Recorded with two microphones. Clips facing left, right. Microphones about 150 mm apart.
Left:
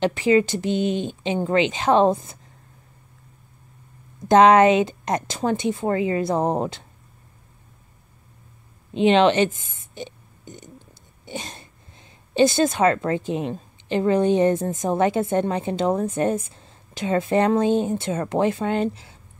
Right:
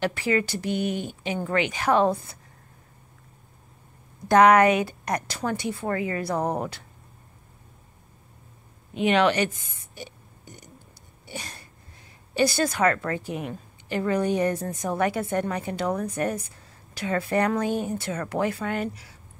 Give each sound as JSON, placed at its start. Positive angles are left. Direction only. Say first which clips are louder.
{"t": 0.0, "sound": "a woman's voice", "louder": "left 6 dB", "side_deg": 20}
{"t": 4.3, "sound": "a woman's voice", "louder": "left 3 dB", "side_deg": 25}
{"t": 8.9, "sound": "speech", "louder": "left 5 dB", "side_deg": 25}